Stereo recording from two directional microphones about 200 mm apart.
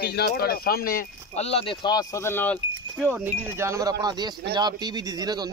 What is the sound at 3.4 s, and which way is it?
Speech, 15° right (ahead or behind).